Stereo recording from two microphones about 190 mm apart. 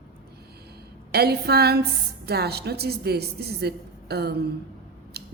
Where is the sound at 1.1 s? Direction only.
55° right (ahead or behind).